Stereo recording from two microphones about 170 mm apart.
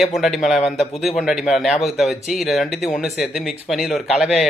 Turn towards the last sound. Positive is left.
turn(degrees=0)  # may be behind; listen again after turning